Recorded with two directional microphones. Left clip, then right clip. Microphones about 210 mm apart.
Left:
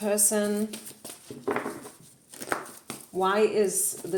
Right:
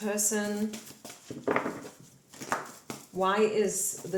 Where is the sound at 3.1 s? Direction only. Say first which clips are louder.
Left 2 dB; 45° left (ahead or behind).